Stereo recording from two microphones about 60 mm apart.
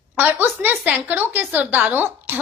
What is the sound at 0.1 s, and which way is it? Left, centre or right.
A woman's voice, right.